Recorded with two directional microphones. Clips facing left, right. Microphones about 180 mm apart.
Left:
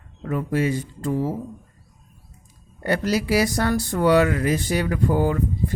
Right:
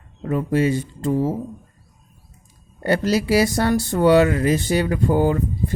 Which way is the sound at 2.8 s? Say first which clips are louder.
Right 3 dB; 30° right (ahead or behind).